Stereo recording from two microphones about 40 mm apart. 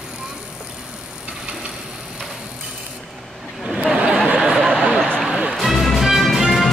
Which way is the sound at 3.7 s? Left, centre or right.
Centre.